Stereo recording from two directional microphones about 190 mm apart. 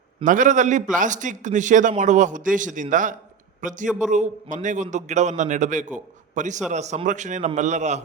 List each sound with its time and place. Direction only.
0.3 s a man's voice: 40° right (ahead or behind)
3.8 s a man's voice: 5° right (ahead or behind)
4.1 s a man's voice: 40° right (ahead or behind)